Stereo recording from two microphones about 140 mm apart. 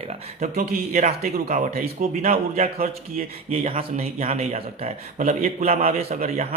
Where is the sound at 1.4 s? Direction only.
50° right (ahead or behind).